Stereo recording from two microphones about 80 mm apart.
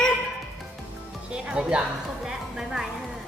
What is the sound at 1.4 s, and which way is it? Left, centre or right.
A woman's voice, centre.